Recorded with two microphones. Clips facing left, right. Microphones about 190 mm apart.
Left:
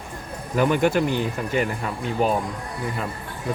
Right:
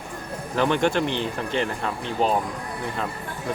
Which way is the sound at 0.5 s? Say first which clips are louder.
Left 2 dB; 5° left (ahead or behind).